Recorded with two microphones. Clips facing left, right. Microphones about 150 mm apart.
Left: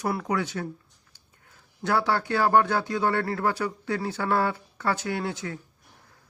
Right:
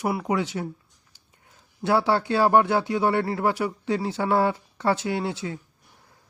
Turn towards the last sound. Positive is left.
turn(degrees=-20)  # may be behind; listen again after turning